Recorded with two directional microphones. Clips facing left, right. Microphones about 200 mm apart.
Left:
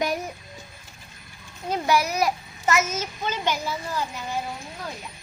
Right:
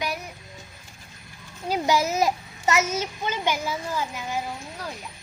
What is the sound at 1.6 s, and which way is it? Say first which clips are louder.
Speech: even; 10° right (ahead or behind).